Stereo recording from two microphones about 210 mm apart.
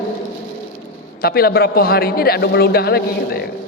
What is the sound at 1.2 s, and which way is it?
A man's voice, 50° left (ahead or behind).